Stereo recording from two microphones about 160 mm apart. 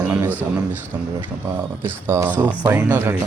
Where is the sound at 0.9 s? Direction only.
15° right (ahead or behind).